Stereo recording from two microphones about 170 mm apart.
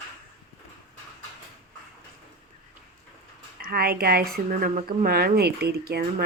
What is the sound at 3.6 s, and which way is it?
Speech, 60° right (ahead or behind).